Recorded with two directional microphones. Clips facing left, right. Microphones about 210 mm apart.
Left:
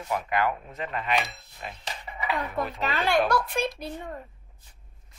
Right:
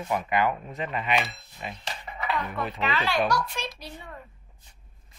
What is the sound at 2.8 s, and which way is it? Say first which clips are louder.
A child's voice: left 2 dB; 50° left (ahead or behind).